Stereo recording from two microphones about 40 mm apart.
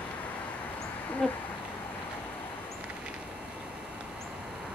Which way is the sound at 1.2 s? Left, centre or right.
Centre.